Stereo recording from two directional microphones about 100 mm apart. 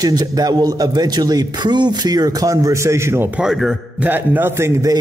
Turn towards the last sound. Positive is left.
turn(degrees=-30)  # may be behind; listen again after turning